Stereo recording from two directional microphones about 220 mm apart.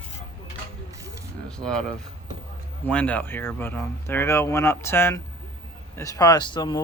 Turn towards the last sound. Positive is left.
turn(degrees=20)  # may be behind; listen again after turning